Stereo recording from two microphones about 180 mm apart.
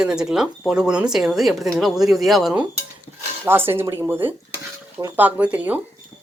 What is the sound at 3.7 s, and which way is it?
Speech, 10° right (ahead or behind).